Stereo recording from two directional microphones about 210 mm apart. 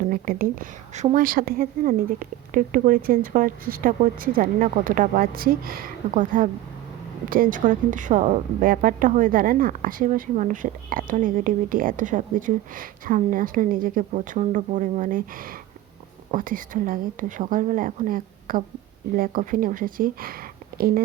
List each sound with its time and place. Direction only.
0.0 s a woman's voice: 40° right (ahead or behind)